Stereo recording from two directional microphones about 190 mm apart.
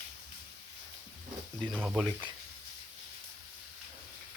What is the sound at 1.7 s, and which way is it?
Speech, 10° right (ahead or behind).